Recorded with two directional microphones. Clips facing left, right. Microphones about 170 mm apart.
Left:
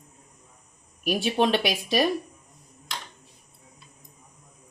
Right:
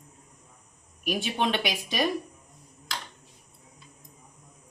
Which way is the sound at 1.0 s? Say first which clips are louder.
Left 5 dB; 35° left (ahead or behind).